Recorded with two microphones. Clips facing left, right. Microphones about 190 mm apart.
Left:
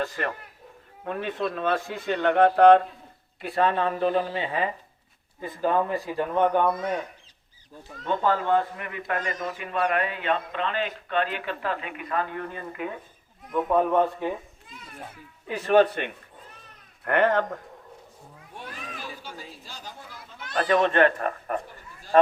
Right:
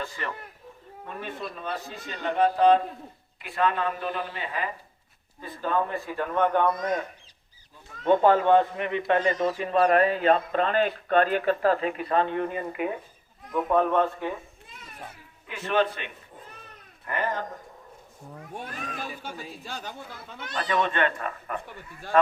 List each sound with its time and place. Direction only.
0.0 s speech: 55° left (ahead or behind)
1.0 s a man's voice: 70° left (ahead or behind)
3.4 s speech: 35° left (ahead or behind)
6.1 s a man's voice: 15° left (ahead or behind)
8.0 s speech: 20° right (ahead or behind)
13.5 s a man's voice: 5° left (ahead or behind)
15.4 s speech: 40° left (ahead or behind)
17.0 s a man's voice: 70° left (ahead or behind)
18.3 s speech: 45° right (ahead or behind)
20.6 s speech: 45° left (ahead or behind)
22.1 s speech: 35° left (ahead or behind)